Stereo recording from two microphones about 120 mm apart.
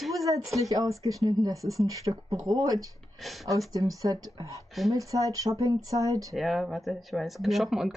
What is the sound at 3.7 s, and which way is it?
Speech, 30° right (ahead or behind).